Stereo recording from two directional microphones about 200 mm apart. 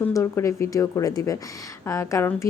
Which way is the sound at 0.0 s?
15° left (ahead or behind).